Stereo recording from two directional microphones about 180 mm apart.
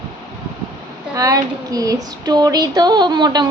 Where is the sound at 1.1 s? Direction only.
20° right (ahead or behind).